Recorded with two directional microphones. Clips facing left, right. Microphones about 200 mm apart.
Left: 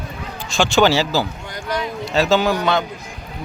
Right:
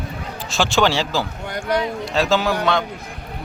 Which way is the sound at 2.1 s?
Centre (ahead or behind).